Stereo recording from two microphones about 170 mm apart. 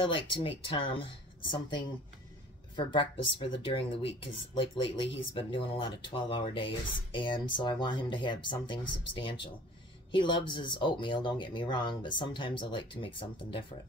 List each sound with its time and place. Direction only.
0.0 s speech: 30° left (ahead or behind)